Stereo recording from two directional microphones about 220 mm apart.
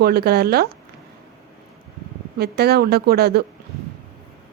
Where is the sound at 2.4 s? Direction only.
45° right (ahead or behind).